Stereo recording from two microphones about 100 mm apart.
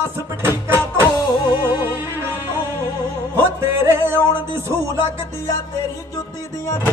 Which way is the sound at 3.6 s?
25° right (ahead or behind).